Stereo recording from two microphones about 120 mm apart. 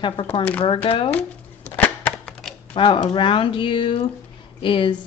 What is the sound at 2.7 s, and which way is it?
Speech, 45° left (ahead or behind).